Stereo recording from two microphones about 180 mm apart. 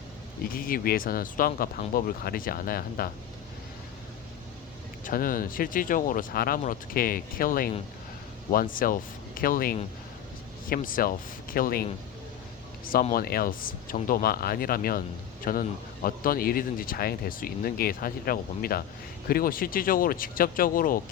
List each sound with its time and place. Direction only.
0.4 s speech: 55° left (ahead or behind)
5.0 s speech: 50° left (ahead or behind)